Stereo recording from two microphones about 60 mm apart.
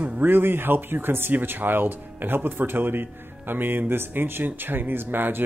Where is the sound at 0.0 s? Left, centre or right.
Right.